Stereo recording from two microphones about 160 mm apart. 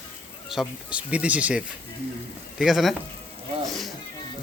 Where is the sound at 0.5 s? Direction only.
5° right (ahead or behind).